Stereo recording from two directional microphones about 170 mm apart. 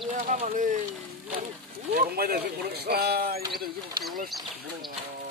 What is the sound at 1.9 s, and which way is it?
Speech, 60° right (ahead or behind).